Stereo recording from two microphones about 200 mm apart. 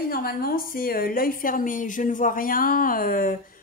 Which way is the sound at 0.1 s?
50° left (ahead or behind).